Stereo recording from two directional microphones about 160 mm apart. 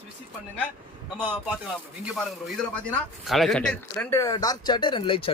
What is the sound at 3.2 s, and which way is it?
Speech, centre (ahead or behind).